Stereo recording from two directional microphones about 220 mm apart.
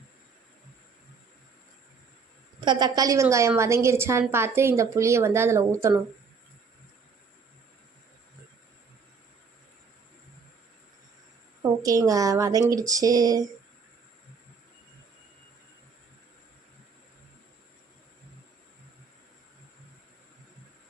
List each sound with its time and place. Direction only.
2.6 s a woman's voice: 20° right (ahead or behind)
11.8 s a woman's voice: 15° right (ahead or behind)